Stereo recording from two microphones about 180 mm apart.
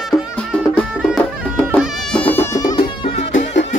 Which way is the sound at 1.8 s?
5° left (ahead or behind).